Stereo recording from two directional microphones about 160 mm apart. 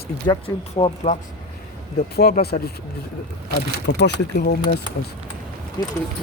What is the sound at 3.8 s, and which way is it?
Speech, 85° left.